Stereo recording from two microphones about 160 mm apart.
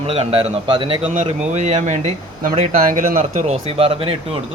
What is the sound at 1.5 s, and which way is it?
Speech, 50° right (ahead or behind).